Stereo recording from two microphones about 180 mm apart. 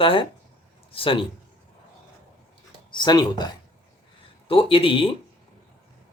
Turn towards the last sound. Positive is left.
turn(degrees=30)  # may be behind; listen again after turning